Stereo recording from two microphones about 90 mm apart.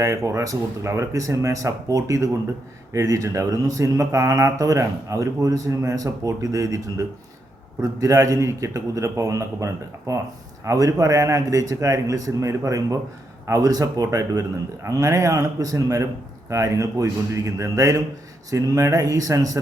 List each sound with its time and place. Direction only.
0.0 s speech: 35° right (ahead or behind)